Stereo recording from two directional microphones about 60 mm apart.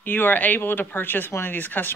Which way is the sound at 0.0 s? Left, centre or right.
Left.